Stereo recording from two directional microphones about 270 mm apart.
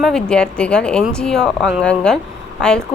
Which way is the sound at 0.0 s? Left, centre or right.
Centre.